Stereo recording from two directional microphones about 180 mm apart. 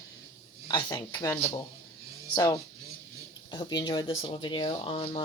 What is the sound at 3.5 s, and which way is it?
Speech, 25° left (ahead or behind).